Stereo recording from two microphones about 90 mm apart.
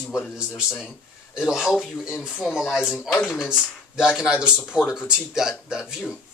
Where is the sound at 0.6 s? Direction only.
10° right (ahead or behind).